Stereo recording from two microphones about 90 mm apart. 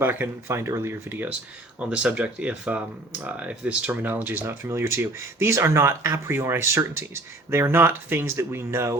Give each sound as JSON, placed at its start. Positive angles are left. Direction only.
{"t": 0.0, "sound": "speech", "side_deg": -25}
{"t": 1.8, "sound": "speech", "side_deg": -15}